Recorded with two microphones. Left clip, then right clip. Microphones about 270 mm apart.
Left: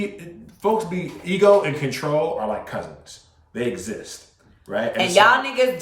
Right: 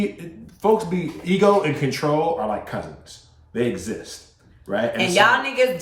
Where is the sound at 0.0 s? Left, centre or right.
Centre.